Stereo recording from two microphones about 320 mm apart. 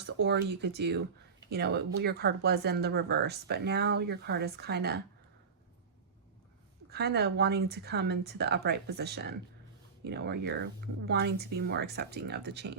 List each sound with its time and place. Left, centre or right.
0.0 s speech: right
6.9 s speech: right